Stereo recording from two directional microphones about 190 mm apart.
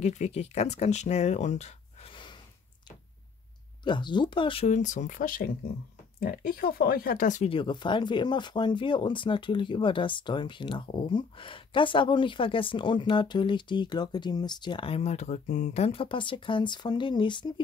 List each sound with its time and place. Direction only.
0.0 s speech: 35° left (ahead or behind)
3.8 s speech: 25° left (ahead or behind); by 7.4 s 45° left (ahead or behind)
7.4 s speech: 25° left (ahead or behind)